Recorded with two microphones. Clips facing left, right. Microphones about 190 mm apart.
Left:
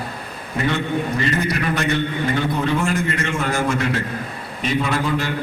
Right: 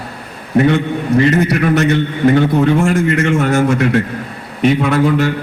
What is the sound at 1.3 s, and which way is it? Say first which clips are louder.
Speech: right 8 dB; 75° right (ahead or behind).